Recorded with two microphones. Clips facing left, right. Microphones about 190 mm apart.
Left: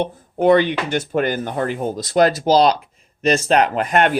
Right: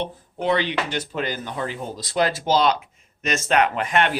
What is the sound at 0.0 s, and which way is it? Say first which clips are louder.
Speech: left 8 dB; 50° left (ahead or behind).